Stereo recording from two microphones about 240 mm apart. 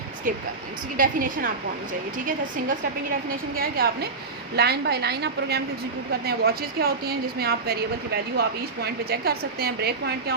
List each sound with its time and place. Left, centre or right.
0.9 s a woman's voice: right
3.2 s a woman's voice: right